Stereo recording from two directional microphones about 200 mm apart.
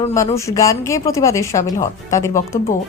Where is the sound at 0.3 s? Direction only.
15° left (ahead or behind).